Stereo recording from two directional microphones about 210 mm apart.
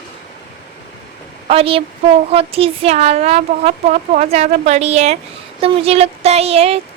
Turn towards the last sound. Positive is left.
turn(degrees=-30)  # may be behind; listen again after turning